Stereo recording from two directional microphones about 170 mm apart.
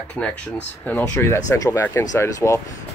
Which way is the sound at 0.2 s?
5° left (ahead or behind).